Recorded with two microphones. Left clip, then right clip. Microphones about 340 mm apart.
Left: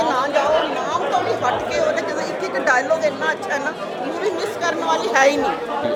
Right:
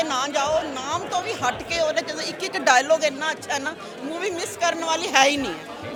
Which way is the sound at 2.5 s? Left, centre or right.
Right.